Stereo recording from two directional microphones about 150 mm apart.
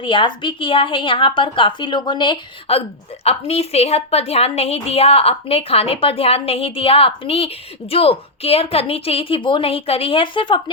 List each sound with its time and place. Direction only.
0.0 s a woman's voice: 35° left (ahead or behind)